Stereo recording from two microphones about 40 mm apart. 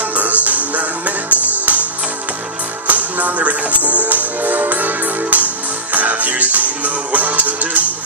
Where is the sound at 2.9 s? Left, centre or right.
Right.